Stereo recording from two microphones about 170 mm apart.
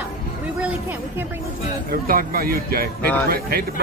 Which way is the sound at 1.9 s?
60° right (ahead or behind).